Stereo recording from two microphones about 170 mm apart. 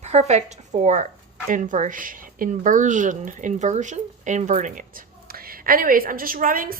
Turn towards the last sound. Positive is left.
turn(degrees=-55)  # may be behind; listen again after turning